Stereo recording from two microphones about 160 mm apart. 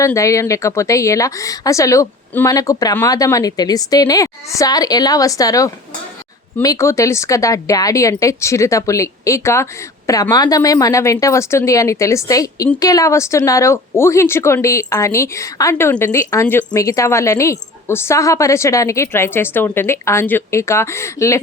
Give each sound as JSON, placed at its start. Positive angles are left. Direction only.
{"t": 0.0, "sound": "a woman's voice", "side_deg": 20}